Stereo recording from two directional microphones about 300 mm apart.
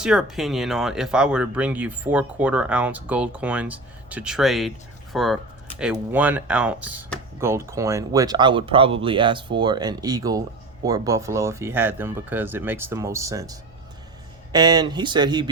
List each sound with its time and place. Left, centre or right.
0.0 s speech: centre